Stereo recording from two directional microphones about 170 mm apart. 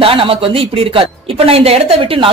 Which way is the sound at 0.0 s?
35° right (ahead or behind).